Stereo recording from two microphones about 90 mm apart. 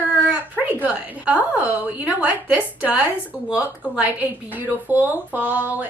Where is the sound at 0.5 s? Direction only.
20° right (ahead or behind).